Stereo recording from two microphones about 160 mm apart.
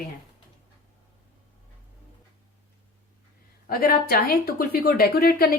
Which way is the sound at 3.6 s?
70° left (ahead or behind).